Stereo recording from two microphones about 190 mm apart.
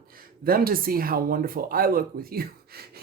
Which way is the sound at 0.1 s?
50° right (ahead or behind).